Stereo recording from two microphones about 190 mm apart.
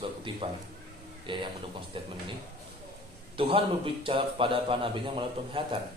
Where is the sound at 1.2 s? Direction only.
25° right (ahead or behind).